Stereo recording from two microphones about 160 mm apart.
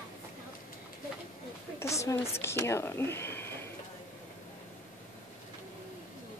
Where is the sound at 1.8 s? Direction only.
20° left (ahead or behind).